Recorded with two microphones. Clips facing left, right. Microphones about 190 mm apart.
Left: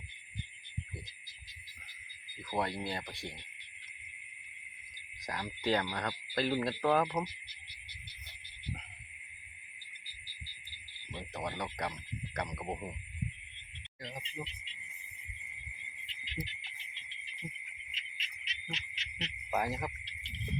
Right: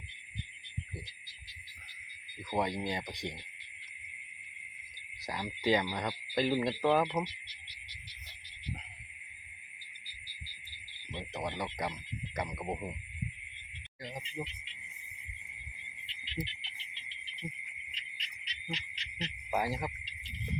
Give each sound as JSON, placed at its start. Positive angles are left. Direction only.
{"t": 2.5, "sound": "speech", "side_deg": -15}
{"t": 5.2, "sound": "speech", "side_deg": -10}
{"t": 11.3, "sound": "speech", "side_deg": -10}
{"t": 14.0, "sound": "speech", "side_deg": -5}
{"t": 16.0, "sound": "insect", "side_deg": 45}
{"t": 18.2, "sound": "a sound", "side_deg": 5}
{"t": 19.5, "sound": "speech", "side_deg": -10}